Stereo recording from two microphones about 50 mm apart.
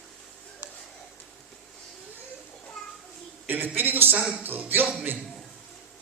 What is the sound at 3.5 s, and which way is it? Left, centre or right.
Speech, right.